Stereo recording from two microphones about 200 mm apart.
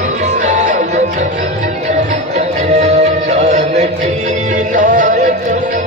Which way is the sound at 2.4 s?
35° right (ahead or behind).